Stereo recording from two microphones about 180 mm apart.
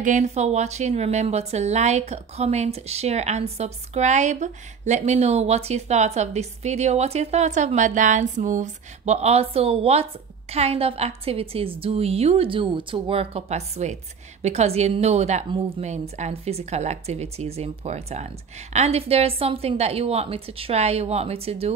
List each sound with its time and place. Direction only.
0.0 s a woman's voice: 40° right (ahead or behind)